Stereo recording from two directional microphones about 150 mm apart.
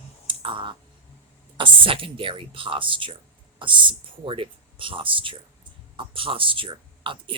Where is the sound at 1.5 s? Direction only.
35° right (ahead or behind).